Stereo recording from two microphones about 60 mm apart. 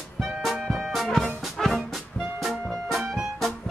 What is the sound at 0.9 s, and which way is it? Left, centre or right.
Music, centre.